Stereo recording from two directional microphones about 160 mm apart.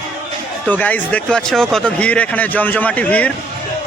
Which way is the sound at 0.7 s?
10° left (ahead or behind).